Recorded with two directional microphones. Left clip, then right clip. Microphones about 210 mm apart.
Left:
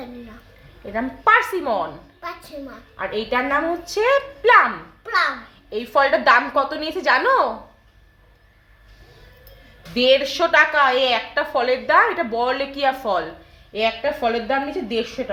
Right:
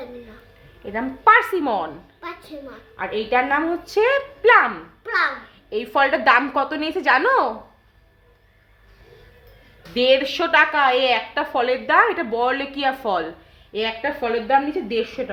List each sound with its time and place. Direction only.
0.9 s a woman's voice: 25° right (ahead or behind)
5.7 s a woman's voice: 20° right (ahead or behind)
9.9 s a woman's voice: 20° right (ahead or behind)